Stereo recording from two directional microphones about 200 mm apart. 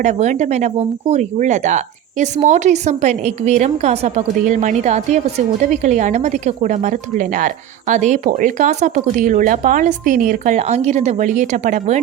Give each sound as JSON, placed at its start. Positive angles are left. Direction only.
{"t": 0.0, "sound": "a woman's voice", "side_deg": -35}